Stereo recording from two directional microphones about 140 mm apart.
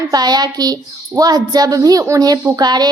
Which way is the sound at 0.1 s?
30° right (ahead or behind).